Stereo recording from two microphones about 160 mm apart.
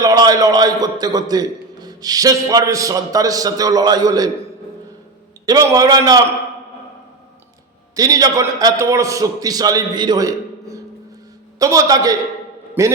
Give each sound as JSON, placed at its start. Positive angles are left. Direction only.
{"t": 0.0, "sound": "a man's voice", "side_deg": -25}
{"t": 5.5, "sound": "a man's voice", "side_deg": -20}
{"t": 7.9, "sound": "a man's voice", "side_deg": -20}